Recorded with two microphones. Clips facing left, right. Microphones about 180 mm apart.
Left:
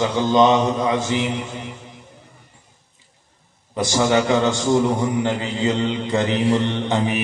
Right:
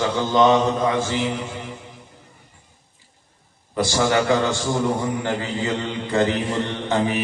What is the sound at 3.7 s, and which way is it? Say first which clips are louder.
A man's voice: left 2 dB; 20° left (ahead or behind).